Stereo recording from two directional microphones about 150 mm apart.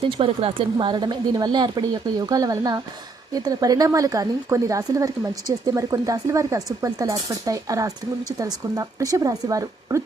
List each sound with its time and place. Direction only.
0.0 s speech: 40° right (ahead or behind); by 10.0 s 25° right (ahead or behind)